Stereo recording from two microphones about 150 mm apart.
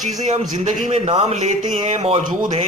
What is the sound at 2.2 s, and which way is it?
Speech, 60° right (ahead or behind).